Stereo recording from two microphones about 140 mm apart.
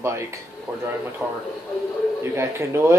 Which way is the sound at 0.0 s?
20° right (ahead or behind).